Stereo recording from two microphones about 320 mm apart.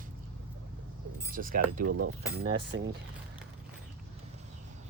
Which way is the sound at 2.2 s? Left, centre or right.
Right.